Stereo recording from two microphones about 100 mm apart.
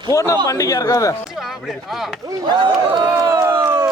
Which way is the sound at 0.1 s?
30° left (ahead or behind).